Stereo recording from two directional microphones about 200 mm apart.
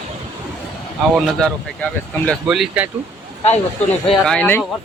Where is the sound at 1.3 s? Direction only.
5° left (ahead or behind).